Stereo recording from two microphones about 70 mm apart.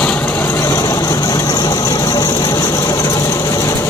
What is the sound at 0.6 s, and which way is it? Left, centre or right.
Vehicle, left.